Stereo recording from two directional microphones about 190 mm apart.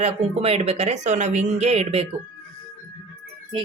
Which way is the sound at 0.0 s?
35° right (ahead or behind).